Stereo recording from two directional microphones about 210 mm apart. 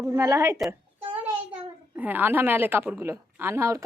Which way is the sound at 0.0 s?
15° right (ahead or behind).